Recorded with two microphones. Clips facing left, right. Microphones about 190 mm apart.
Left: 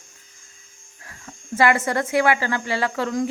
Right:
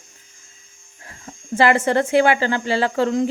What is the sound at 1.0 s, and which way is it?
Speech, 30° right (ahead or behind).